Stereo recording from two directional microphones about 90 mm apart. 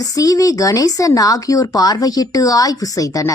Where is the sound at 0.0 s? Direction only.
40° left (ahead or behind).